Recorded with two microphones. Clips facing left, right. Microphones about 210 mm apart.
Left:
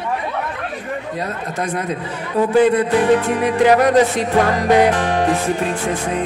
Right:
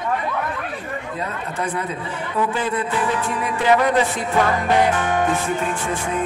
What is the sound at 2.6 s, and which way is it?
Music, 70° left (ahead or behind).